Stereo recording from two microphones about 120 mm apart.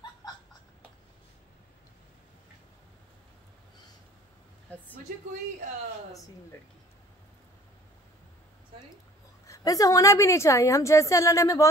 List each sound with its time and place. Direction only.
0.2 s laughter: 35° left (ahead or behind)
9.5 s a woman's voice: 30° left (ahead or behind)